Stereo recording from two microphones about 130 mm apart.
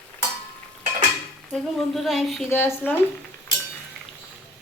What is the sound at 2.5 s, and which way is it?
Speech, 15° left (ahead or behind).